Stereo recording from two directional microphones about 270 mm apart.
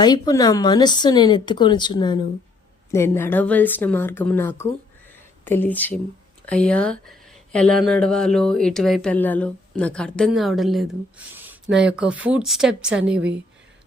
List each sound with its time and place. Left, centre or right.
0.0 s a woman's voice: centre